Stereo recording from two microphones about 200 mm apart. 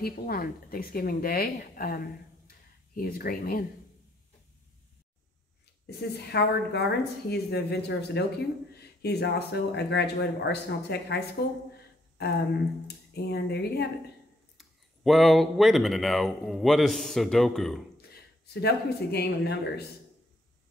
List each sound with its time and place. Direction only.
0.0 s speech: 50° left (ahead or behind)
5.9 s a woman's voice: 55° left (ahead or behind)
14.6 s speech: centre (ahead or behind)
18.1 s speech: 55° left (ahead or behind)